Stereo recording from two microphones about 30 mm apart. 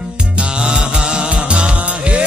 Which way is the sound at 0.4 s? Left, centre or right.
Right.